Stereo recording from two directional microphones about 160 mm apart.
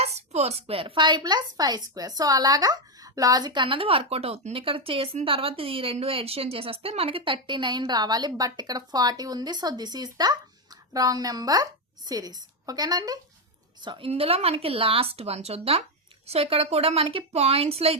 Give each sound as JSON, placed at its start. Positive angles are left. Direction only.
{"t": 0.0, "sound": "a woman's voice", "side_deg": -40}